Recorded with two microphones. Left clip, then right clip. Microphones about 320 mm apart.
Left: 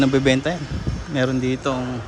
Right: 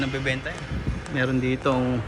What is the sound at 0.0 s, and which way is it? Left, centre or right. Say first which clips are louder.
Speech: left 9 dB; centre.